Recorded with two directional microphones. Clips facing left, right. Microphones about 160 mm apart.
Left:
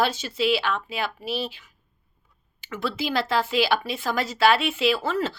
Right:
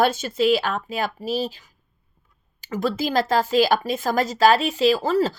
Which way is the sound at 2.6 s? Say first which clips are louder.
Right 4 dB; 40° right (ahead or behind).